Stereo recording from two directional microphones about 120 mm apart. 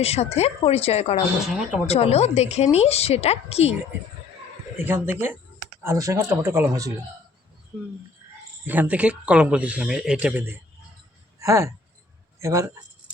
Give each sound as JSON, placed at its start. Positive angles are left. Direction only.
{"t": 0.0, "sound": "a woman's voice", "side_deg": 60}
{"t": 4.8, "sound": "speech", "side_deg": -15}
{"t": 8.6, "sound": "speech", "side_deg": -15}
{"t": 11.3, "sound": "speech", "side_deg": -25}